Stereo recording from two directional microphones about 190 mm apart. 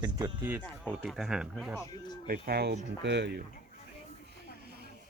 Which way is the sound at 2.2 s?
50° right (ahead or behind).